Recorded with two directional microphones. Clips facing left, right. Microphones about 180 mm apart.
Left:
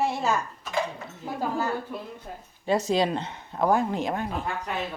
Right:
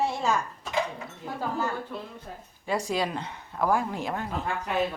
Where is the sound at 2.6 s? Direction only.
25° left (ahead or behind).